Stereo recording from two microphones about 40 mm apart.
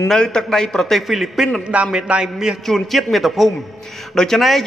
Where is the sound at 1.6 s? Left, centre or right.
Right.